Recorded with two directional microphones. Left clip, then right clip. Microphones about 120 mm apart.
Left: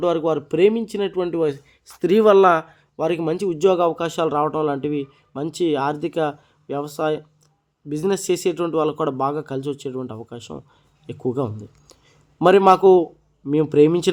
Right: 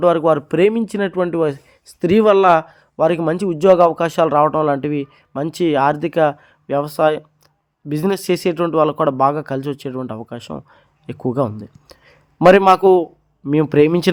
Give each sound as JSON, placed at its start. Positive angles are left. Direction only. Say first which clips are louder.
{"t": 0.0, "sound": "speech", "louder": "right 6 dB", "side_deg": -35}
{"t": 2.9, "sound": "speech", "louder": "right 6 dB", "side_deg": -30}